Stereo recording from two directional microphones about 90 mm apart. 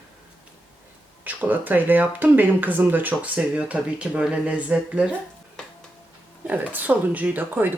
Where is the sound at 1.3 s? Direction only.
20° right (ahead or behind).